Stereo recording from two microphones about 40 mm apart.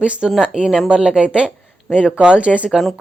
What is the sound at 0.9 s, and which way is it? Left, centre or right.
Speech, right.